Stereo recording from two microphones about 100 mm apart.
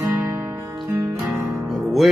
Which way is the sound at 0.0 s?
25° right (ahead or behind).